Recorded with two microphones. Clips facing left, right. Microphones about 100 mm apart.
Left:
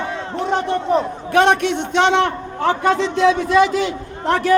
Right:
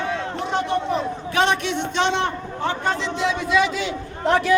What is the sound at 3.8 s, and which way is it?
Speech, 45° left (ahead or behind).